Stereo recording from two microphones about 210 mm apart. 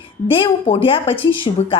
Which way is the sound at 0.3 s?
25° left (ahead or behind).